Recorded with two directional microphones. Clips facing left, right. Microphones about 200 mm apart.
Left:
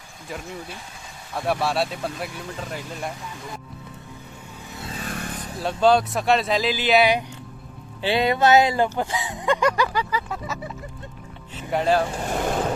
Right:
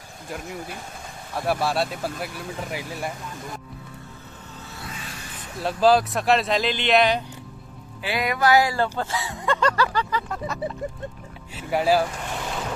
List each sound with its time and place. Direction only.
1.4 s speech: centre (ahead or behind)
4.9 s vehicle: 55° left (ahead or behind)
5.5 s speech: centre (ahead or behind)
8.0 s speech: 25° left (ahead or behind); by 12.0 s 5° right (ahead or behind)